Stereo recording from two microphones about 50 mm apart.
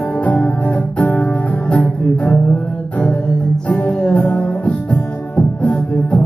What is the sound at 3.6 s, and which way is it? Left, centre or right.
Music, left.